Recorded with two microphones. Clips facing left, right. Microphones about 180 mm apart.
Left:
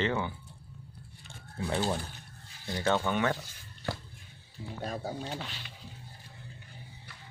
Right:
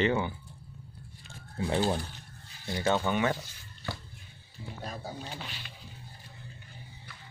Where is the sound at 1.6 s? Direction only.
25° right (ahead or behind).